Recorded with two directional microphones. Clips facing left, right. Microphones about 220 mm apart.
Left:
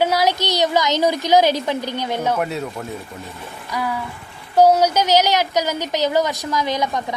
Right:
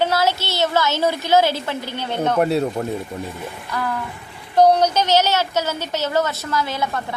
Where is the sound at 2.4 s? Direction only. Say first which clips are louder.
Right 6 dB; 35° right (ahead or behind).